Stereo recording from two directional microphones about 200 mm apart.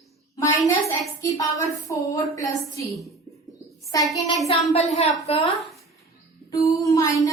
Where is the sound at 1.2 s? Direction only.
15° left (ahead or behind).